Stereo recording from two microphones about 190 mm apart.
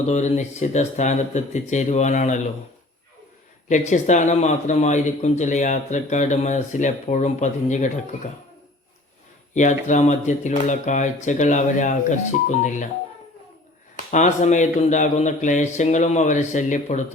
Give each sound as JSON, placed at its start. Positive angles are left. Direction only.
{"t": 0.1, "sound": "speech", "side_deg": 35}
{"t": 3.7, "sound": "speech", "side_deg": 40}
{"t": 9.6, "sound": "speech", "side_deg": 40}
{"t": 14.1, "sound": "speech", "side_deg": 40}